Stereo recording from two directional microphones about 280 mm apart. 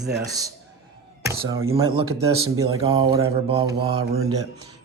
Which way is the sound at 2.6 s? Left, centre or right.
Centre.